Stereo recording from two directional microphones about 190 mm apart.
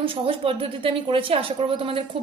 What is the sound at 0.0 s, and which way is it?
A woman's voice, 25° right (ahead or behind).